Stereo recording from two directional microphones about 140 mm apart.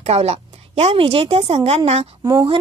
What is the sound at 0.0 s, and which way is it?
A woman's voice, 45° right (ahead or behind).